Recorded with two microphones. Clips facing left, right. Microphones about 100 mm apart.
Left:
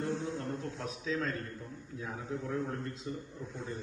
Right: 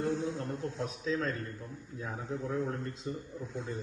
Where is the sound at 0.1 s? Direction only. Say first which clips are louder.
Right 2 dB; 15° right (ahead or behind).